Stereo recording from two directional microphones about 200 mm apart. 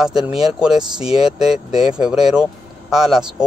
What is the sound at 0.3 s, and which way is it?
Speech, 30° left (ahead or behind).